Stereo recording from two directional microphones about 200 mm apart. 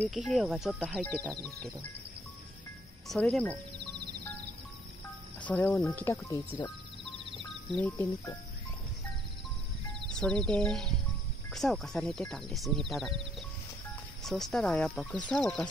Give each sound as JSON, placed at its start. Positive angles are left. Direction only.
{"t": 0.0, "sound": "speech", "side_deg": 0}
{"t": 3.1, "sound": "speech", "side_deg": 5}
{"t": 3.9, "sound": "music", "side_deg": -55}
{"t": 5.4, "sound": "speech", "side_deg": 10}
{"t": 7.7, "sound": "speech", "side_deg": 10}
{"t": 10.1, "sound": "speech", "side_deg": 5}
{"t": 14.2, "sound": "speech", "side_deg": 0}